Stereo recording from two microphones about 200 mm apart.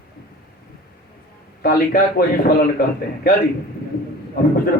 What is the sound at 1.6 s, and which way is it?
Speech, 45° left (ahead or behind).